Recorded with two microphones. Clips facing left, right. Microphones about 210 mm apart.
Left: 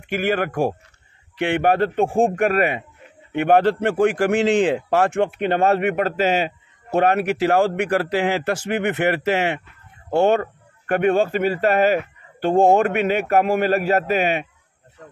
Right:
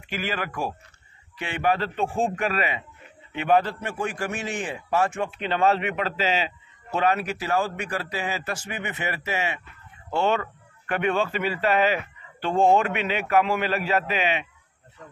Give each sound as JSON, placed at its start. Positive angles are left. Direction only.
{"t": 0.0, "sound": "speech", "side_deg": 55}
{"t": 3.3, "sound": "speech", "side_deg": 65}
{"t": 10.0, "sound": "speech", "side_deg": 50}